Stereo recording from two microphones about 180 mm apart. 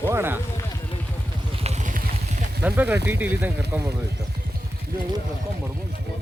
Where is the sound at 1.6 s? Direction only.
40° right (ahead or behind).